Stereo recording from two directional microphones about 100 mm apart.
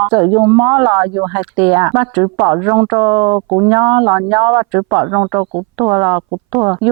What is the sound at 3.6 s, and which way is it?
Speech, 20° right (ahead or behind).